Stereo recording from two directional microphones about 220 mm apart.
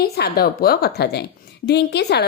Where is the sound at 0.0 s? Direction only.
45° left (ahead or behind).